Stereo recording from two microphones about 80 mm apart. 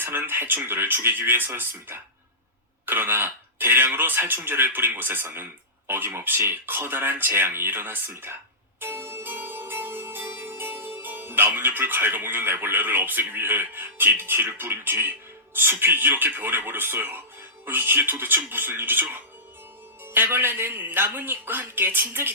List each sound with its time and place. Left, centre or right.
0.0 s speech: right
8.8 s music: right
15.5 s speech: right
20.1 s speech: right